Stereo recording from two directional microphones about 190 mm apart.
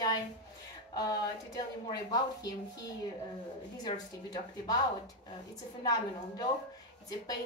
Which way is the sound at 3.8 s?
20° left (ahead or behind).